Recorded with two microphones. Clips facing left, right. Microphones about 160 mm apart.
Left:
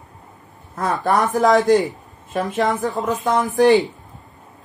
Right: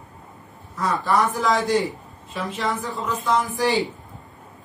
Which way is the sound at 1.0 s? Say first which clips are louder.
Left 5 dB; 45° left (ahead or behind).